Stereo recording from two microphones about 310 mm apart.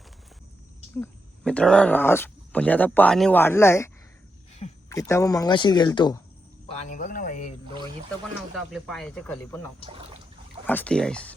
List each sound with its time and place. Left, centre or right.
1.0 s speech: centre
4.9 s speech: centre
6.9 s speech: left
8.5 s speech: centre
10.7 s speech: centre